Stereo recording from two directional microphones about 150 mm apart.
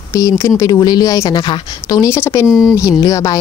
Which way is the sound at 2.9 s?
25° left (ahead or behind).